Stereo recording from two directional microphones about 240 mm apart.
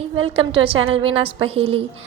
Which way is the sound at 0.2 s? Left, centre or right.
Right.